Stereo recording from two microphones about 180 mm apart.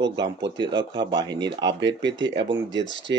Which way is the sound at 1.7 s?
80° right.